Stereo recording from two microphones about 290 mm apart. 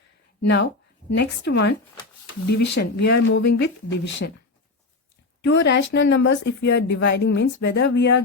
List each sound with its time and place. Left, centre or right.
0.4 s speech: left
5.4 s speech: left